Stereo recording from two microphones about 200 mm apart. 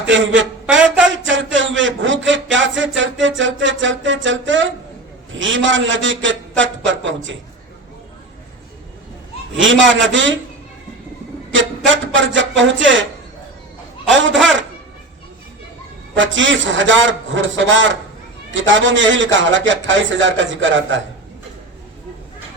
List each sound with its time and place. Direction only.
0.1 s a man's voice: 70° right (ahead or behind)
1.2 s a sound: 70° right (ahead or behind)
5.3 s a man's voice: 70° right (ahead or behind)
9.6 s a man's voice: 70° right (ahead or behind)
11.9 s a man's voice: 70° right (ahead or behind)
14.1 s a man's voice: 70° right (ahead or behind)
16.1 s a man's voice: 70° right (ahead or behind)